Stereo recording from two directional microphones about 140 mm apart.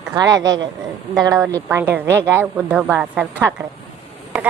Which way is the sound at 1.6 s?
15° right (ahead or behind).